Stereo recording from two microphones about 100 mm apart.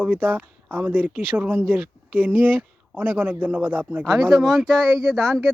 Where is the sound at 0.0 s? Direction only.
15° right (ahead or behind).